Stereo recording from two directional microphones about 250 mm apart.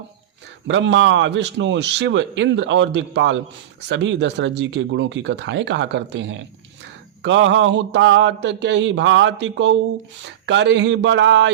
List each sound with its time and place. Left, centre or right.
0.7 s a man's voice: right